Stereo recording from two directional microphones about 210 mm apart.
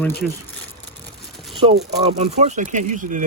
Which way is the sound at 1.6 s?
30° right (ahead or behind).